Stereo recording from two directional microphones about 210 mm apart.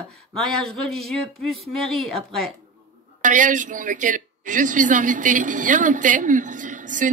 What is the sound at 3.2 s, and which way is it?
A woman's voice, 40° right (ahead or behind).